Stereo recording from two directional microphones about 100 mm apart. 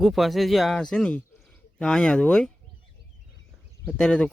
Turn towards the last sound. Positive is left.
turn(degrees=10)  # may be behind; listen again after turning